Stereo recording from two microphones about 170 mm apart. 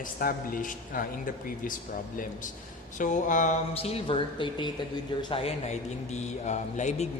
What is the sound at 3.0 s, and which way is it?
Speech, 50° left (ahead or behind).